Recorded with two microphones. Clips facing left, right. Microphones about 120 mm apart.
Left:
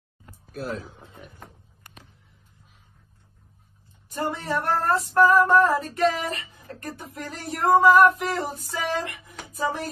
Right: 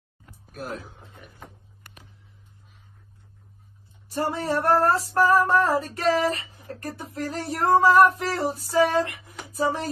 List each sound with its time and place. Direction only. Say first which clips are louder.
0.5 s speech: left 3 dB; 50° right (ahead or behind)
4.1 s female singing: right 2 dB; 35° right (ahead or behind)
9.5 s music: right 2 dB; 35° right (ahead or behind)